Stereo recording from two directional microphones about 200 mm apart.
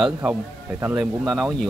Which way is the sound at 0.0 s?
5° right (ahead or behind).